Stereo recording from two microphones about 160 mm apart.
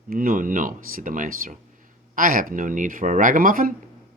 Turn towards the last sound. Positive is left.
turn(degrees=-60)  # may be behind; listen again after turning